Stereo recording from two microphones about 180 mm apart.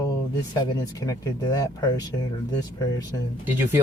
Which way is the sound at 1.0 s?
20° left (ahead or behind).